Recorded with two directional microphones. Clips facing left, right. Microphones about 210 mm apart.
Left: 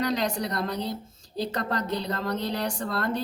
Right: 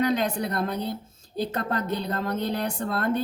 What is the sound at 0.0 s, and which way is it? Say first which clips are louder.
A woman's voice: right 3 dB; 55° right (ahead or behind).